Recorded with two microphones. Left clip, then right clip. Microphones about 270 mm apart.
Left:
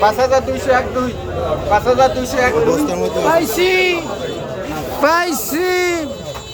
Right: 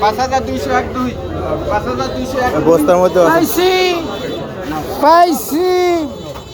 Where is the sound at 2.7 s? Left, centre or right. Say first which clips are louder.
Right 7 dB; centre.